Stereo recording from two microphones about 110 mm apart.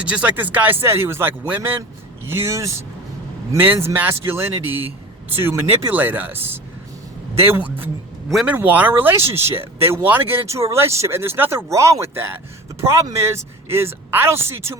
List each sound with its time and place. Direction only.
0.0 s speech: 10° right (ahead or behind)